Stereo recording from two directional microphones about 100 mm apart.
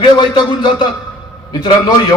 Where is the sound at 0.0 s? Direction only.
50° left (ahead or behind).